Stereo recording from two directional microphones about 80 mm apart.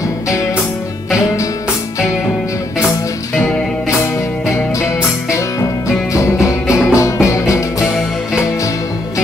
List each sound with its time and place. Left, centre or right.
6.1 s music: left